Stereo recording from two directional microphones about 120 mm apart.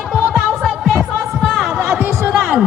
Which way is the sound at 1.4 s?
Centre (ahead or behind).